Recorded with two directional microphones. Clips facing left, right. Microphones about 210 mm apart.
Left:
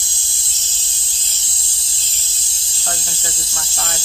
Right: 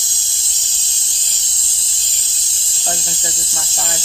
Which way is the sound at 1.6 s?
20° right (ahead or behind).